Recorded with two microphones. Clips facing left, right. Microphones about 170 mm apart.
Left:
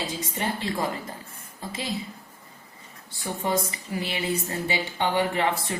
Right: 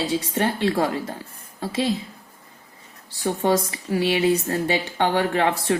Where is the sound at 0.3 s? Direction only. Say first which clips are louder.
Right 6 dB; 70° right (ahead or behind).